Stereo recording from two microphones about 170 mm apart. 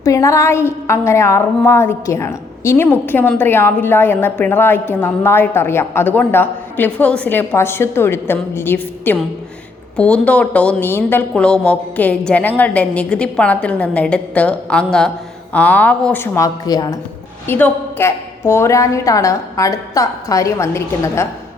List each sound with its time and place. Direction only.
0.0 s a woman's voice: 20° left (ahead or behind)
17.4 s a woman's voice: 10° left (ahead or behind)